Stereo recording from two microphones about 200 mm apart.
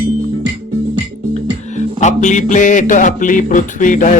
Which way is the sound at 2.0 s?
35° left (ahead or behind).